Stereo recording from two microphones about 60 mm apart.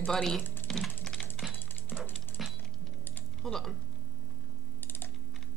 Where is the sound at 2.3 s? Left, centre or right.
Left.